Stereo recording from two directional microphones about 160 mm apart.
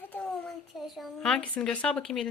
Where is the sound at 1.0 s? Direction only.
5° left (ahead or behind).